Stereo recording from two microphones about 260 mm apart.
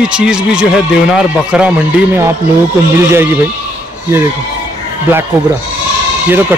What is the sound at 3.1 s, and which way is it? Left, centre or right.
Speech, centre.